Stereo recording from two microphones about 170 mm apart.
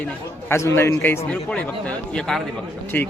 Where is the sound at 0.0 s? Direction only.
15° left (ahead or behind).